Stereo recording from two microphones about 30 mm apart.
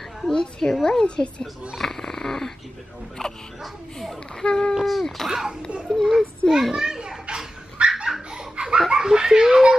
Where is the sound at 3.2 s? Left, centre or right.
Centre.